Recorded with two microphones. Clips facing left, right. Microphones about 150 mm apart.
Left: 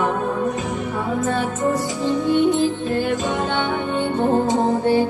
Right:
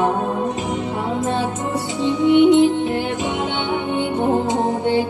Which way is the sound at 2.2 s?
75° right (ahead or behind).